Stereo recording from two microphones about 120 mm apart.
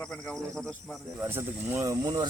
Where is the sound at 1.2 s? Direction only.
20° right (ahead or behind).